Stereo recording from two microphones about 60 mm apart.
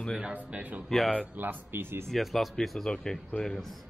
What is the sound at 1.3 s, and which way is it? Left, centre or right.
Speech, right.